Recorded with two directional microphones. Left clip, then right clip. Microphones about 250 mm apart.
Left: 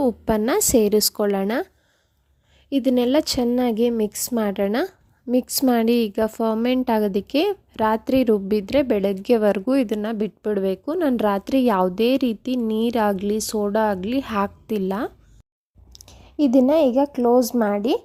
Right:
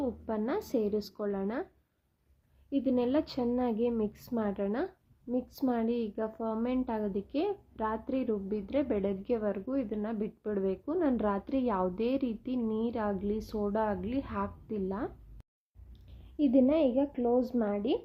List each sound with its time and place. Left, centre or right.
0.0 s speech: left
2.6 s speech: left
16.4 s speech: left